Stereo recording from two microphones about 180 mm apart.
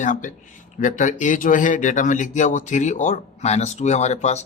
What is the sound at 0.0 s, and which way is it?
Speech, 45° left (ahead or behind).